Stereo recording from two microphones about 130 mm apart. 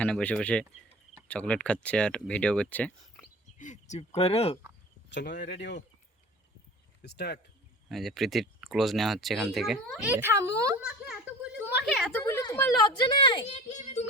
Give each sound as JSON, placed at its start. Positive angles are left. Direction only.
{"t": 0.0, "sound": "speech", "side_deg": 10}
{"t": 3.6, "sound": "speech", "side_deg": 65}
{"t": 7.9, "sound": "speech", "side_deg": 0}
{"t": 10.0, "sound": "speech", "side_deg": -15}
{"t": 10.8, "sound": "a sound", "side_deg": -10}
{"t": 12.1, "sound": "speech", "side_deg": 20}
{"t": 12.4, "sound": "a sound", "side_deg": 25}
{"t": 12.8, "sound": "a woman's voice", "side_deg": 35}
{"t": 13.7, "sound": "a child's voice", "side_deg": 65}